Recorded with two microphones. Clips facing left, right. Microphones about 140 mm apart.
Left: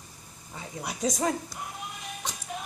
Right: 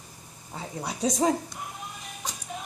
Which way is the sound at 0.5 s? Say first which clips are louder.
Right 2 dB; 30° right (ahead or behind).